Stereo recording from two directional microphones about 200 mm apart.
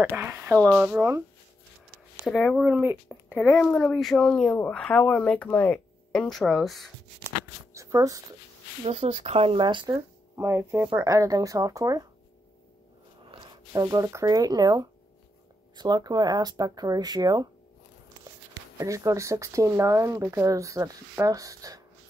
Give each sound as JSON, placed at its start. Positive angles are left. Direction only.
{"t": 0.0, "sound": "speech", "side_deg": -10}
{"t": 2.2, "sound": "speech", "side_deg": 0}
{"t": 7.7, "sound": "a sound", "side_deg": -15}
{"t": 8.8, "sound": "speech", "side_deg": -30}
{"t": 10.3, "sound": "speech", "side_deg": -15}
{"t": 13.3, "sound": "speech", "side_deg": -15}
{"t": 18.8, "sound": "speech", "side_deg": -15}